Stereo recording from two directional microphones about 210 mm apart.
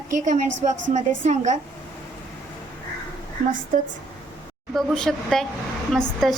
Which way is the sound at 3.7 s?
40° right (ahead or behind).